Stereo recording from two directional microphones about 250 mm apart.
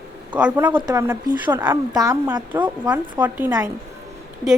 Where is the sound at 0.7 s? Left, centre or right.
Centre.